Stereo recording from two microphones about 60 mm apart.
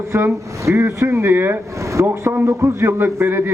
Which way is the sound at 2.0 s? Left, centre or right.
Right.